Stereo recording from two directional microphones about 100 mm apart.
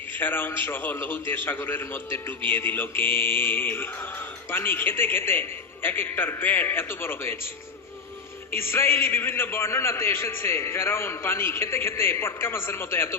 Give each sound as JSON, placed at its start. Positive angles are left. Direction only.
{"t": 0.2, "sound": "a man's voice", "side_deg": 20}
{"t": 8.5, "sound": "a man's voice", "side_deg": 25}